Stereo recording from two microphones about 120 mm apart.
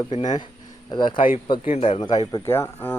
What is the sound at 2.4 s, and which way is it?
Speech, 20° left (ahead or behind).